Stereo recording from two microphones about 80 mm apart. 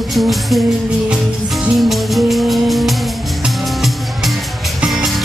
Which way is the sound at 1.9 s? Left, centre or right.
Centre.